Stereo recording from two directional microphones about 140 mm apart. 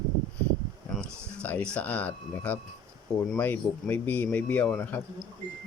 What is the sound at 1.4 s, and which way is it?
Speech, 10° left (ahead or behind).